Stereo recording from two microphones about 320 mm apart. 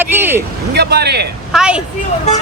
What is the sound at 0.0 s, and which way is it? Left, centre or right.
Speech, centre.